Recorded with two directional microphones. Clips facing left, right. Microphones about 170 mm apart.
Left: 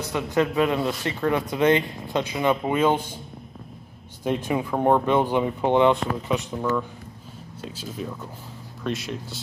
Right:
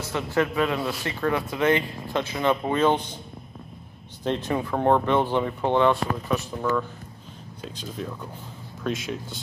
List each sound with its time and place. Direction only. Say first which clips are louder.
0.0 s a man's voice: left 2 dB; 15° left (ahead or behind)
4.2 s a man's voice: left 1 dB; 10° left (ahead or behind)
7.6 s speech: left 1 dB; 5° left (ahead or behind)